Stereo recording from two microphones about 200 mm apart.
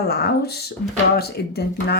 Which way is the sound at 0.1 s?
55° left (ahead or behind).